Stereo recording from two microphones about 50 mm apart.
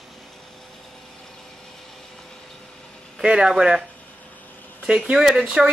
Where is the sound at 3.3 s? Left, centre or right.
Centre.